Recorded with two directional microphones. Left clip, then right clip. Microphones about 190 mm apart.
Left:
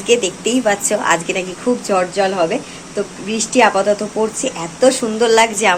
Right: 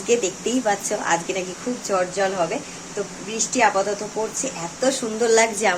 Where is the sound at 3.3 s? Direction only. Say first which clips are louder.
Left 6 dB; 45° left (ahead or behind).